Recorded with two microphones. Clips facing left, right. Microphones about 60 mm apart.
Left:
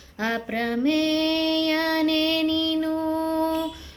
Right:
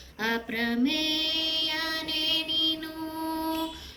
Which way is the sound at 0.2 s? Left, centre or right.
Left.